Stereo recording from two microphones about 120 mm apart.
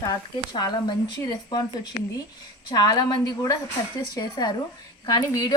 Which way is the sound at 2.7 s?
35° left (ahead or behind).